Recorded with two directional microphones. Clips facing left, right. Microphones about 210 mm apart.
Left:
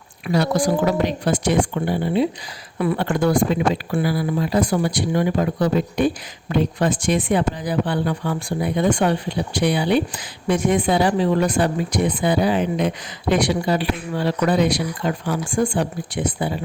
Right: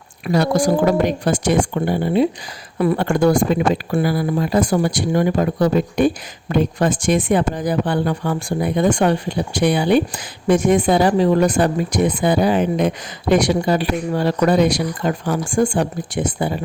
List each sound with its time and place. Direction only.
0.3 s speech: 45° right (ahead or behind)